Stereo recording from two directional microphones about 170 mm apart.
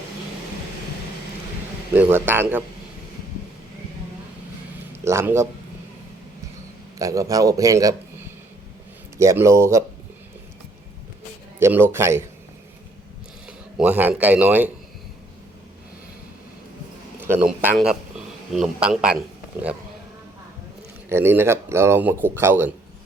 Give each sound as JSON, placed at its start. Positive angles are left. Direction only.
{"t": 2.0, "sound": "a man's voice", "side_deg": -10}
{"t": 5.0, "sound": "a man's voice", "side_deg": -15}
{"t": 7.0, "sound": "speech", "side_deg": -20}
{"t": 9.1, "sound": "a man's voice", "side_deg": -15}
{"t": 11.6, "sound": "a man's voice", "side_deg": -15}
{"t": 13.7, "sound": "a man's voice", "side_deg": -10}
{"t": 17.2, "sound": "a man's voice", "side_deg": -10}
{"t": 21.1, "sound": "a man's voice", "side_deg": -15}